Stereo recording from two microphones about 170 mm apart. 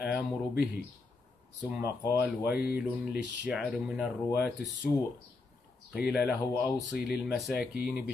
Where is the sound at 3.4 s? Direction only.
5° right (ahead or behind).